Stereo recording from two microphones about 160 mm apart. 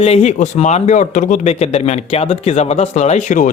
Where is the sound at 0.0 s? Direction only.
45° left (ahead or behind).